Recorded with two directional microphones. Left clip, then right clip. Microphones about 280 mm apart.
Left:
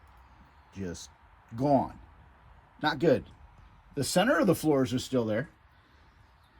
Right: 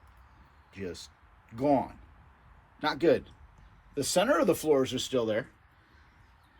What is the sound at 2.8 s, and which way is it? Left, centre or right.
Speech, left.